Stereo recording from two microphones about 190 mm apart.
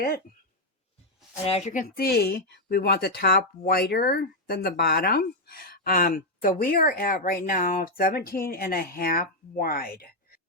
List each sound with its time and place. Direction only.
1.5 s speech: 35° left (ahead or behind)